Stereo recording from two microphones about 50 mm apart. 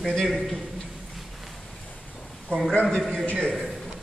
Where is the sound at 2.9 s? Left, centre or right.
Centre.